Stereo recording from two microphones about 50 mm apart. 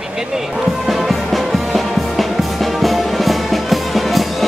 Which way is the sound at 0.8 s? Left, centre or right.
Centre.